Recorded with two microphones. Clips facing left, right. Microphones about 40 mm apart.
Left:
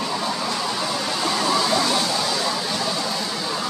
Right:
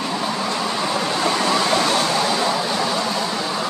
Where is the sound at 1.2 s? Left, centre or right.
Right.